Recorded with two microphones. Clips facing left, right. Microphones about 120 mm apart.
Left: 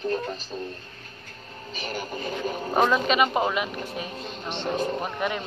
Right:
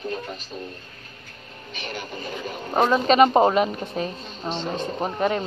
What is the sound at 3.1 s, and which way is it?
Speech, 35° right (ahead or behind).